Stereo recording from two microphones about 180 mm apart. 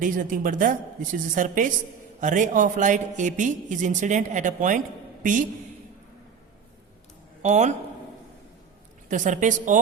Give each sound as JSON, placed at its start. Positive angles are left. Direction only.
{"t": 0.0, "sound": "a woman's voice", "side_deg": -50}
{"t": 7.4, "sound": "speech", "side_deg": -40}
{"t": 9.0, "sound": "a woman's voice", "side_deg": -45}